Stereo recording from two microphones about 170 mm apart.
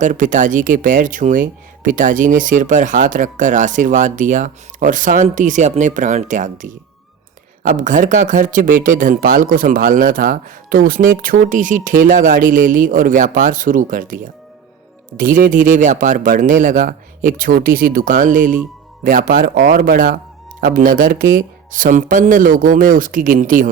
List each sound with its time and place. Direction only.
0.0 s speech: 50° right (ahead or behind)
15.2 s speech: 50° right (ahead or behind)